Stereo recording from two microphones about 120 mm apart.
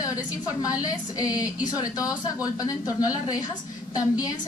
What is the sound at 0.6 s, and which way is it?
Speech, 30° left (ahead or behind).